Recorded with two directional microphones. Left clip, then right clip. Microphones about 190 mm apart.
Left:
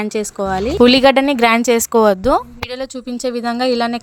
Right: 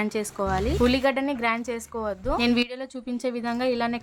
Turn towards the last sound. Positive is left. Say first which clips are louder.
# left 9 dB
turn(degrees=35)  # may be behind; listen again after turning